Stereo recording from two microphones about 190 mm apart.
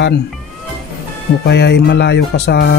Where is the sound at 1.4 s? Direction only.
60° left (ahead or behind).